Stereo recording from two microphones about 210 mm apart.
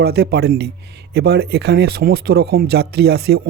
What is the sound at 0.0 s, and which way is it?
Speech, 50° right (ahead or behind).